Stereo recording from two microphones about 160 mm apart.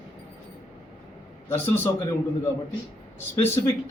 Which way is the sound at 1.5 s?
10° left (ahead or behind).